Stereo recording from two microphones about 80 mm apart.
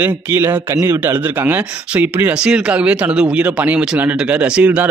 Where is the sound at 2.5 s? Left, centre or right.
Centre.